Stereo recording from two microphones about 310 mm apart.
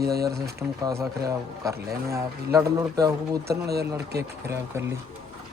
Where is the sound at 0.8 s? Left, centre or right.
Centre.